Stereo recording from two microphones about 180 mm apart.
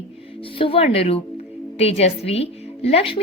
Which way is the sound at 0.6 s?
35° left (ahead or behind).